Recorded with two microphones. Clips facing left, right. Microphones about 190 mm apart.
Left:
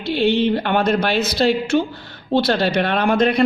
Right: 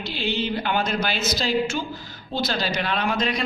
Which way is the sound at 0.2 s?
60° left (ahead or behind).